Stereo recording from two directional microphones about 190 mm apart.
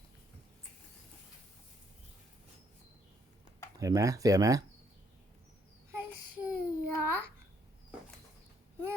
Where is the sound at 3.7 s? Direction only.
15° right (ahead or behind).